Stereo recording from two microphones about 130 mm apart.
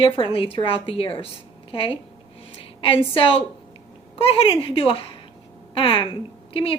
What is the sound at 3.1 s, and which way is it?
A woman's voice, 45° left (ahead or behind).